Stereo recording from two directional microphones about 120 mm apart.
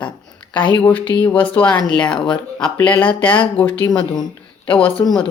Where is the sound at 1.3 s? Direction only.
10° left (ahead or behind).